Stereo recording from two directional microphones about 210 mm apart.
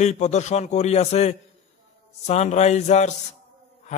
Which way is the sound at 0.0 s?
35° left (ahead or behind).